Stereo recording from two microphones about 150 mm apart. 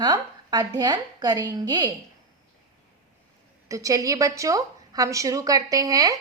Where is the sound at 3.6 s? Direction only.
20° right (ahead or behind).